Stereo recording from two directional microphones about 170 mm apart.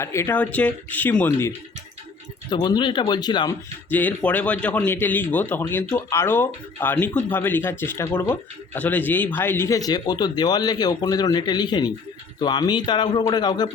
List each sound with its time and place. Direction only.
0.0 s speech: 15° left (ahead or behind)
2.5 s a man's voice: 25° left (ahead or behind)
3.8 s a man's voice: 10° left (ahead or behind)